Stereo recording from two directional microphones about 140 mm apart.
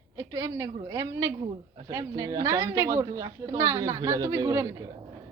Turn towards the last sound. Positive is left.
turn(degrees=-25)  # may be behind; listen again after turning